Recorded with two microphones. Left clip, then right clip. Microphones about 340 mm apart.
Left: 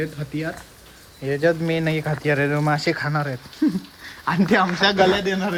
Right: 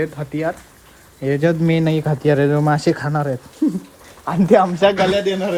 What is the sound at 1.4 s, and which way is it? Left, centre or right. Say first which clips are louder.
Speech: right 2 dB; right.